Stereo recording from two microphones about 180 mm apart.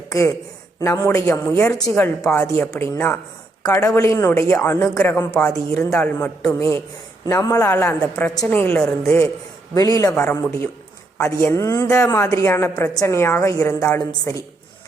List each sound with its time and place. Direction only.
0.1 s a woman's voice: 15° left (ahead or behind)